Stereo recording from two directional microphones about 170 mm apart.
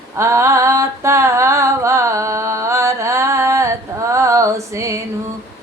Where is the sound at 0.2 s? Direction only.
15° right (ahead or behind).